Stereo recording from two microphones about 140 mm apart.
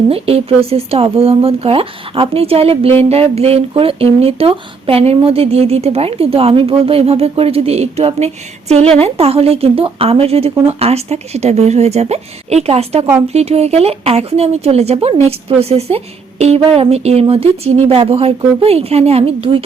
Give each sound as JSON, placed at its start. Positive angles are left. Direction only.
{"t": 0.1, "sound": "speech", "side_deg": -45}